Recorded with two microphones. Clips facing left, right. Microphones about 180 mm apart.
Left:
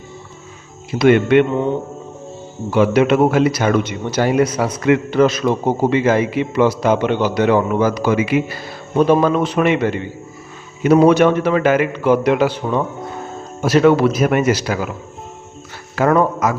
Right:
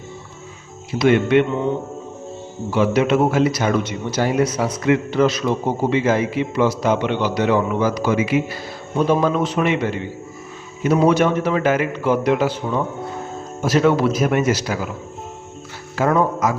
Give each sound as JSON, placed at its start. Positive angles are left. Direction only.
{"t": 0.9, "sound": "speech", "side_deg": 60}
{"t": 2.7, "sound": "a man's voice", "side_deg": 60}
{"t": 13.7, "sound": "a man's voice", "side_deg": 70}
{"t": 16.0, "sound": "speech", "side_deg": 65}